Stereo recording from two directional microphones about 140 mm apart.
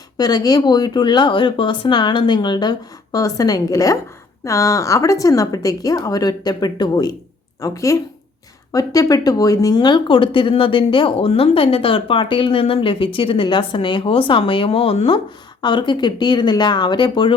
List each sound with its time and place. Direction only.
0.2 s speech: 30° left (ahead or behind)